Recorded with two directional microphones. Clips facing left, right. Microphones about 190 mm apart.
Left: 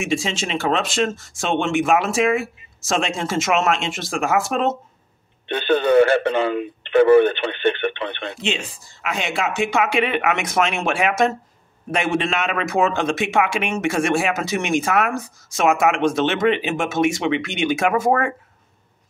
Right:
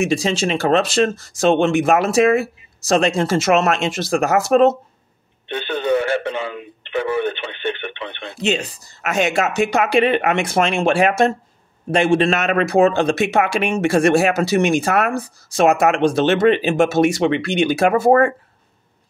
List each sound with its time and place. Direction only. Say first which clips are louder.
0.0 s speech: right 5 dB; 40° right (ahead or behind)
5.5 s speech: left 3 dB; 60° left (ahead or behind)
8.4 s speech: right 9 dB; 40° right (ahead or behind)